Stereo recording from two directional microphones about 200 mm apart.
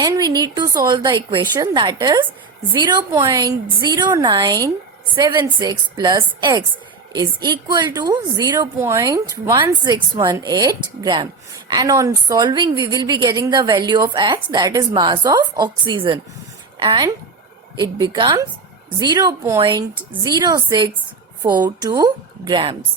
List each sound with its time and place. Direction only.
0.0 s a woman's voice: 20° right (ahead or behind)